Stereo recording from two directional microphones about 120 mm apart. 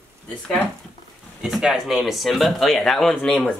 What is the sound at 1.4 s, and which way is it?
Speech, 5° right (ahead or behind).